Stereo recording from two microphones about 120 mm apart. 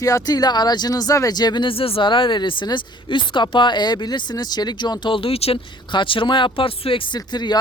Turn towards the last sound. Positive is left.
turn(degrees=35)  # may be behind; listen again after turning